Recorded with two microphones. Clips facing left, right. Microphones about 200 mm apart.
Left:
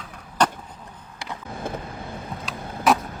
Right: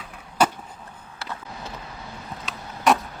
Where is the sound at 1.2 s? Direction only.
15° left (ahead or behind).